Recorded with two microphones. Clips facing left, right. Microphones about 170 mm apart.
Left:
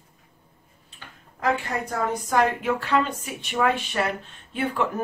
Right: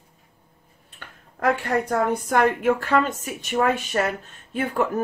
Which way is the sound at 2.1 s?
60° right (ahead or behind).